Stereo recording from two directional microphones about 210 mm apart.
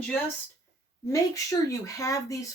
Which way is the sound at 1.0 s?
15° left (ahead or behind).